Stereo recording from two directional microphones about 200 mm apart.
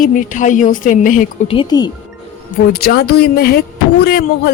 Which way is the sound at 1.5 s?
25° left (ahead or behind).